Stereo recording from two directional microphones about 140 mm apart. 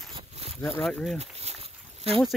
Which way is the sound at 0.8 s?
Centre (ahead or behind).